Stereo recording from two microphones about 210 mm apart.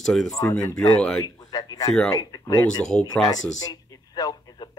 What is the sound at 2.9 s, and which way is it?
Speech, 5° left (ahead or behind).